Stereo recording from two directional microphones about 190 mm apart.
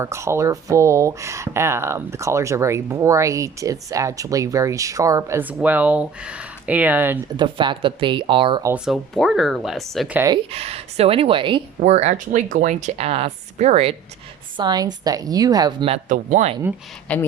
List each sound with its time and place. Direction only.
0.0 s speech: 15° right (ahead or behind)
7.3 s a woman's voice: 25° right (ahead or behind)
8.6 s speech: 5° right (ahead or behind)
10.2 s a woman's voice: 20° right (ahead or behind)
10.5 s speech: 30° right (ahead or behind)
14.5 s a woman's voice: 20° right (ahead or behind)
15.9 s speech: 40° right (ahead or behind)
17.1 s speech: 5° left (ahead or behind)